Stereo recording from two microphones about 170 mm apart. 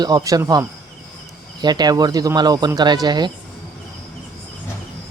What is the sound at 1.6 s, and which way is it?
Speech, 25° right (ahead or behind).